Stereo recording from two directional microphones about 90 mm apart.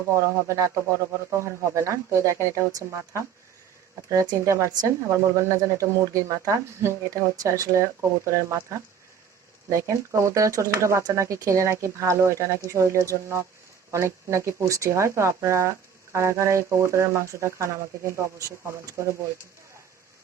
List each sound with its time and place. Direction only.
0.1 s speech: 30° right (ahead or behind)